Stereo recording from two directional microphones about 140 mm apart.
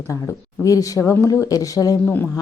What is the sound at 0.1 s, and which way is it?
A woman's voice, 25° left (ahead or behind).